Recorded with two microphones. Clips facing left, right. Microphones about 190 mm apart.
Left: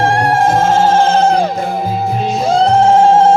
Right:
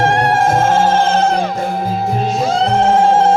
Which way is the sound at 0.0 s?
30° left (ahead or behind).